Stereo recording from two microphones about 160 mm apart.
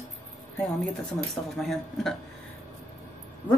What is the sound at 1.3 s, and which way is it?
Speech, centre (ahead or behind).